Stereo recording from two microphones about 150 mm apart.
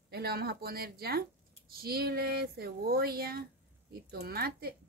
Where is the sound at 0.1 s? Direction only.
90° right.